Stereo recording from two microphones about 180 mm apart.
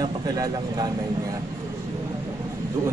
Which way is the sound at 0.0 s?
20° right (ahead or behind).